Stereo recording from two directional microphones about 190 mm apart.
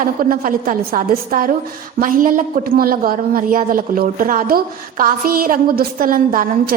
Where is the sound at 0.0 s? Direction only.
50° right (ahead or behind).